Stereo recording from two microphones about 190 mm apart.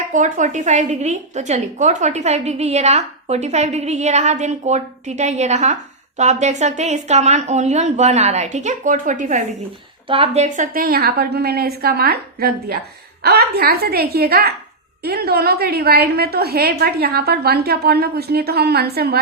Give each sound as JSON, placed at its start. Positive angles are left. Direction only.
{"t": 0.1, "sound": "a woman's voice", "side_deg": -40}
{"t": 10.1, "sound": "a woman's voice", "side_deg": -30}